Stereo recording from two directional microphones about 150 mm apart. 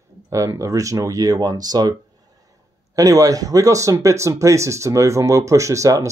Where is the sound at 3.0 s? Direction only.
25° right (ahead or behind).